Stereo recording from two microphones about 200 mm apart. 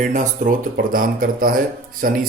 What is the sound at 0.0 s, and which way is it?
Speech, 40° right (ahead or behind).